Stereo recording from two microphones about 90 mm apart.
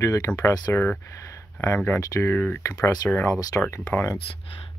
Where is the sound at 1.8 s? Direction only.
35° left (ahead or behind).